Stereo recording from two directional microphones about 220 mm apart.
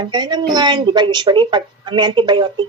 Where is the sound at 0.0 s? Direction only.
20° right (ahead or behind).